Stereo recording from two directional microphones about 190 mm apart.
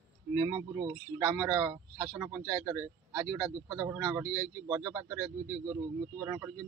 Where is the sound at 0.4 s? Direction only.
20° right (ahead or behind).